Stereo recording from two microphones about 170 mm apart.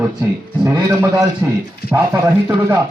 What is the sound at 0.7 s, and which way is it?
Chopping, 15° right (ahead or behind).